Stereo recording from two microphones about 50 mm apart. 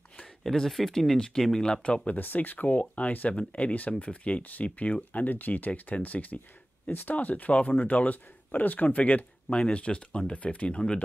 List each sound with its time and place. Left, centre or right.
0.2 s speech: centre
2.0 s speech: left